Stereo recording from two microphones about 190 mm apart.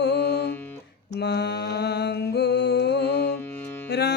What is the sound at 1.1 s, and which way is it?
Mantra, 60° left (ahead or behind).